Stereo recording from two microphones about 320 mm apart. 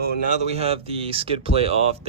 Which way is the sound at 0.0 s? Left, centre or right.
Right.